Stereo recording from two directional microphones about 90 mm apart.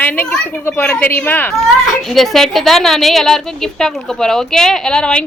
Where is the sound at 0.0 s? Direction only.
25° left (ahead or behind).